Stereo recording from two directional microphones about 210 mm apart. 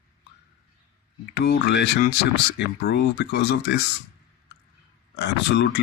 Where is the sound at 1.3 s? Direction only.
50° left (ahead or behind).